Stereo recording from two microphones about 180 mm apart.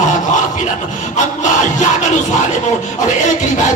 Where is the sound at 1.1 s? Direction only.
40° left (ahead or behind).